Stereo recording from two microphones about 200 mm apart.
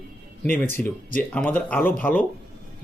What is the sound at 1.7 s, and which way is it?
Speech, 10° left (ahead or behind).